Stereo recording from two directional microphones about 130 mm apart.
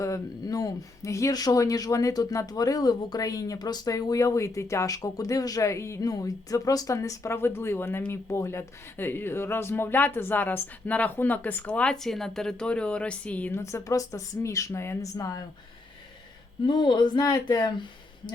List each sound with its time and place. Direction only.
0.0 s speech: 25° left (ahead or behind)
13.6 s speech: 20° left (ahead or behind)
16.6 s speech: 35° left (ahead or behind)